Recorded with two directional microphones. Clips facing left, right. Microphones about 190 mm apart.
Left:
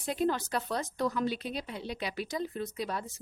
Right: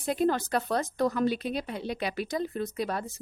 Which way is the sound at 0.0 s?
50° right (ahead or behind).